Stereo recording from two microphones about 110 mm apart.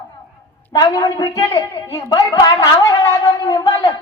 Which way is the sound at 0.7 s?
35° left (ahead or behind).